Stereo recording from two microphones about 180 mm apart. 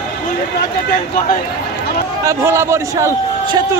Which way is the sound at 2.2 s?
15° right (ahead or behind).